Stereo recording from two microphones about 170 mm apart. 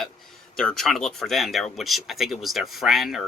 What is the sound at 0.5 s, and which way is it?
Speech, 5° left (ahead or behind).